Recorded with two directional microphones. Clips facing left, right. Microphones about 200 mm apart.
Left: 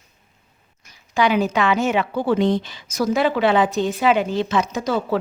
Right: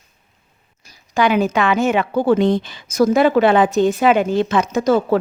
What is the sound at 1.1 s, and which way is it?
A woman's voice, 50° right (ahead or behind).